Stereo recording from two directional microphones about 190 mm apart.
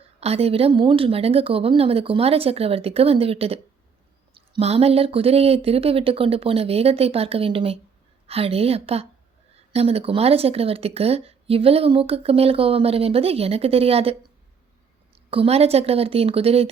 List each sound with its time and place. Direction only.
0.2 s speech: 30° right (ahead or behind)
15.3 s speech: 30° right (ahead or behind)